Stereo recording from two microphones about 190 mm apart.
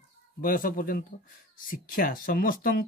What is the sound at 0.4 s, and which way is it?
Speech, 45° left (ahead or behind).